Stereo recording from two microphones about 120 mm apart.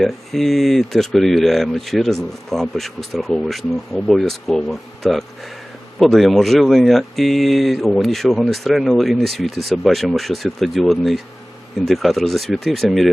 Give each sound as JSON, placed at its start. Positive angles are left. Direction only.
{"t": 0.0, "sound": "speech", "side_deg": 0}